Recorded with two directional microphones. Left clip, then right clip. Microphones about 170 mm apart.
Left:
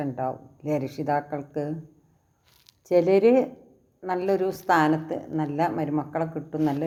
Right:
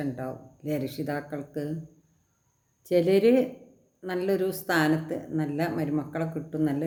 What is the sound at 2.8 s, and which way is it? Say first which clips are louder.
A woman's voice: left 3 dB; 15° right (ahead or behind).